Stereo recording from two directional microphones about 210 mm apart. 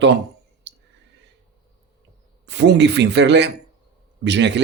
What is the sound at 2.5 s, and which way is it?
Speech, 55° right (ahead or behind).